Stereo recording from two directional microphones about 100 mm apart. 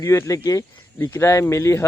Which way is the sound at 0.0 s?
30° left (ahead or behind).